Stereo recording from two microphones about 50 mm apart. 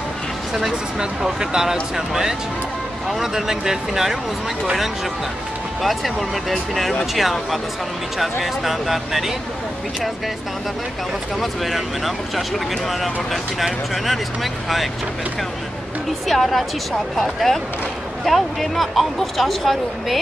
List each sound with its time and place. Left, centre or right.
0.6 s speech: centre
5.8 s speech: centre
11.3 s speech: centre
16.3 s speech: centre